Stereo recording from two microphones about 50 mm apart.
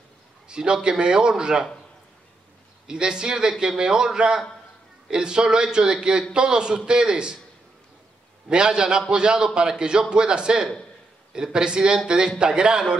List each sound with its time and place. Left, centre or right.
0.5 s a man's voice: centre
2.9 s a man's voice: centre
8.5 s a man's voice: centre